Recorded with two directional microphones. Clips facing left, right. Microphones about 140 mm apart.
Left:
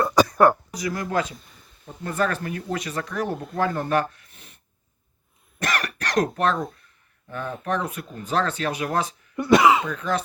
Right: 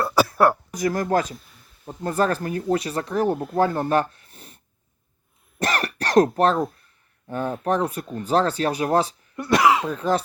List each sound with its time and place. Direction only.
0.0 s throat clearing: 5° right (ahead or behind)
0.7 s speech: 50° right (ahead or behind)
2.0 s speech: 35° right (ahead or behind)
5.5 s cough: 30° right (ahead or behind)
7.3 s speech: 35° right (ahead or behind)
9.3 s cough: centre (ahead or behind)
9.9 s speech: 35° right (ahead or behind)